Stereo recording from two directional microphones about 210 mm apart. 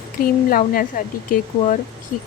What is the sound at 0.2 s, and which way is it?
Speech, 45° left (ahead or behind).